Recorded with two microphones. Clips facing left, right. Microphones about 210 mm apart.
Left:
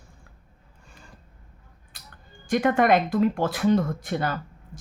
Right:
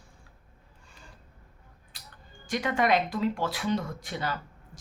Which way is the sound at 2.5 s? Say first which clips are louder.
Left 6 dB; 55° left (ahead or behind).